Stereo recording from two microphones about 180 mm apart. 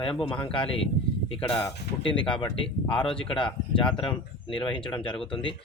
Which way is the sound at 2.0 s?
30° left (ahead or behind).